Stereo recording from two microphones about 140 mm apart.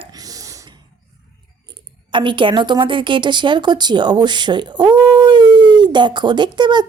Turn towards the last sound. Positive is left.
turn(degrees=-30)  # may be behind; listen again after turning